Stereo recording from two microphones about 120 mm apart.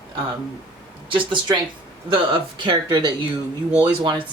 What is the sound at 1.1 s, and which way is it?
A woman's voice, 40° right (ahead or behind).